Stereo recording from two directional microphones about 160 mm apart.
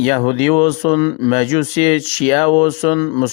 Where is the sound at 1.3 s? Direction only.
40° left (ahead or behind).